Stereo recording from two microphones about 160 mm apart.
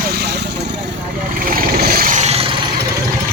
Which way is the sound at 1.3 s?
65° right (ahead or behind).